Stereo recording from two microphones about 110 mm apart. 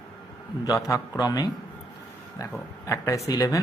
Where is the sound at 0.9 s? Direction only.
35° left (ahead or behind).